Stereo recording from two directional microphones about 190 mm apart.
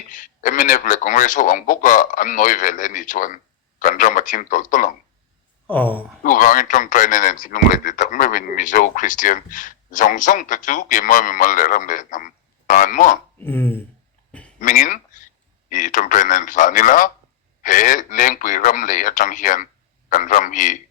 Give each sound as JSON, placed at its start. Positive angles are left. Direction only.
{"t": 0.1, "sound": "speech", "side_deg": 45}
{"t": 5.6, "sound": "speech", "side_deg": 10}
{"t": 6.2, "sound": "speech", "side_deg": 45}
{"t": 13.4, "sound": "speech", "side_deg": 10}
{"t": 14.6, "sound": "speech", "side_deg": 45}